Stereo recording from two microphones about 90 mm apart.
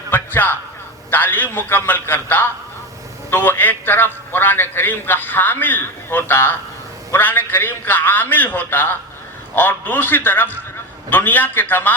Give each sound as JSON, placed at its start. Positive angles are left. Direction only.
{"t": 0.1, "sound": "music", "side_deg": 20}
{"t": 1.1, "sound": "a man's voice", "side_deg": 20}